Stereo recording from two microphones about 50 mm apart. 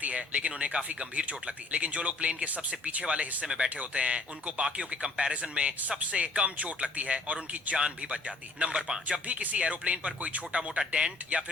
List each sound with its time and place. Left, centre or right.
0.0 s speech: right
3.4 s speech: centre
3.8 s speech: right